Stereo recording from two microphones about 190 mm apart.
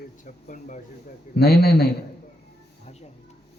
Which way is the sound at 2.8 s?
35° left (ahead or behind).